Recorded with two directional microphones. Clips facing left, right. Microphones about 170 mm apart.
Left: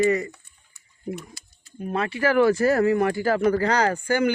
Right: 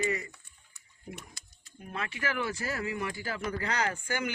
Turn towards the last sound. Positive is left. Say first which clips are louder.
# left 12 dB
turn(degrees=35)  # may be behind; listen again after turning